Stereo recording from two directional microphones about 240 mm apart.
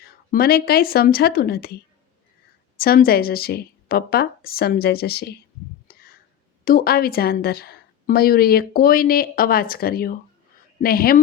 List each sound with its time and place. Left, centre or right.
0.0 s a woman's voice: left
2.7 s a woman's voice: left
5.9 s a sound: left
6.7 s a woman's voice: left